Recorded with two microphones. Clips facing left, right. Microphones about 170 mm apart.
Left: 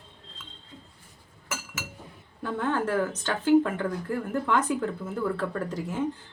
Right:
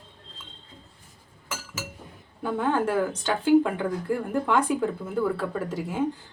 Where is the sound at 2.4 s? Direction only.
10° right (ahead or behind).